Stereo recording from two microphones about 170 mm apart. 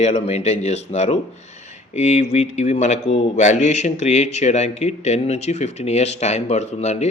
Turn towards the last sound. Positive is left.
turn(degrees=40)  # may be behind; listen again after turning